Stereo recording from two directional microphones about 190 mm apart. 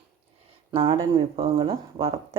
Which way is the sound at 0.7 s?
25° right (ahead or behind).